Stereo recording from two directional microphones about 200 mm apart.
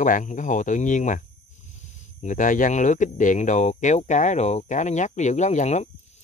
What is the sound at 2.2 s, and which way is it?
Speech, 40° left (ahead or behind).